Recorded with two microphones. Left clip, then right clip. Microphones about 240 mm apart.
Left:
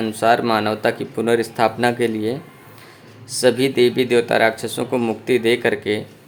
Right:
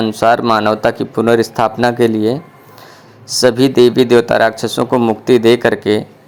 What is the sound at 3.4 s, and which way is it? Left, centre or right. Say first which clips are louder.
Speech: right 6 dB; right.